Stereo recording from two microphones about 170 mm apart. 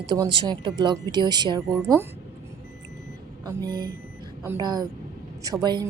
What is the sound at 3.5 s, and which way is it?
Speech, 20° right (ahead or behind).